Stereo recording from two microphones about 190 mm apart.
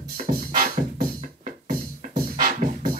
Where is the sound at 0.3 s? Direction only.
50° right (ahead or behind).